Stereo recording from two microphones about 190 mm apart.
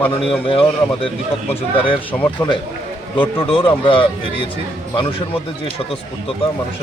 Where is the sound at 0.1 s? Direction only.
30° left (ahead or behind).